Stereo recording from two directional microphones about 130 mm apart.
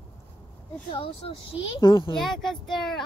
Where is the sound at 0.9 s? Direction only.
45° left (ahead or behind).